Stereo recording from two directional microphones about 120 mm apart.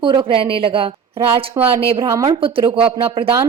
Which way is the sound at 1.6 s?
25° right (ahead or behind).